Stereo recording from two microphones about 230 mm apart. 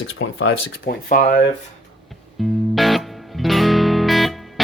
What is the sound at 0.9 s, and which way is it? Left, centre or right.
Speech, left.